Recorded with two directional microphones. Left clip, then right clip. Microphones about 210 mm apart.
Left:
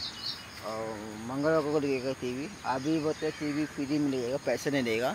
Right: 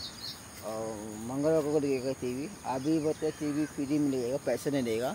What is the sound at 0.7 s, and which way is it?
Speech, 5° left (ahead or behind).